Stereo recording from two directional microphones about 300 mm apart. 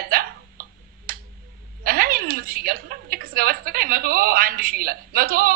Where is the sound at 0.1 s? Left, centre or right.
Right.